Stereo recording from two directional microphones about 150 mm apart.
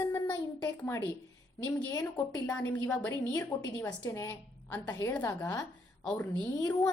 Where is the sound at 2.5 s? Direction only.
10° left (ahead or behind).